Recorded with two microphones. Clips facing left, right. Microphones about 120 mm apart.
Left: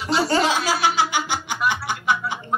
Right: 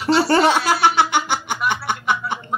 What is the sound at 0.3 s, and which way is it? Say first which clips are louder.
Snicker: right 4 dB; 60° right (ahead or behind).